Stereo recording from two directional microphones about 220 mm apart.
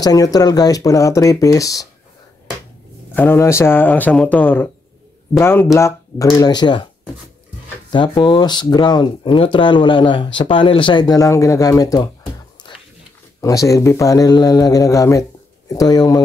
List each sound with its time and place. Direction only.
0.0 s speech: 15° left (ahead or behind)
3.2 s speech: 10° left (ahead or behind)
7.9 s speech: 20° left (ahead or behind)
13.4 s speech: 15° left (ahead or behind)